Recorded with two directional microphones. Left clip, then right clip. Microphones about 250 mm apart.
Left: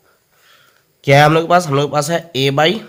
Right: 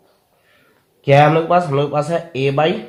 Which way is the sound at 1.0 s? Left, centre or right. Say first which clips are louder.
Left 1 dB; left.